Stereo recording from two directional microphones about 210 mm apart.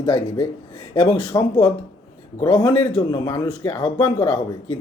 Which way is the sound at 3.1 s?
20° left (ahead or behind).